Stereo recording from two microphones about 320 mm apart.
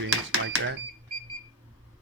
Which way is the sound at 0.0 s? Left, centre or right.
Right.